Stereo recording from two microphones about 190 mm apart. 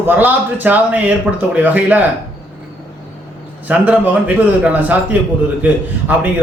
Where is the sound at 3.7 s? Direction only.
10° right (ahead or behind).